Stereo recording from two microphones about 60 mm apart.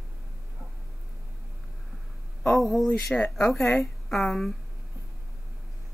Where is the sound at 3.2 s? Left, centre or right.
Left.